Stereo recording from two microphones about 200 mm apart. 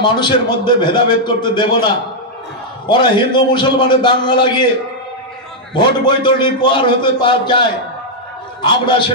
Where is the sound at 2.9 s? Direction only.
25° left (ahead or behind).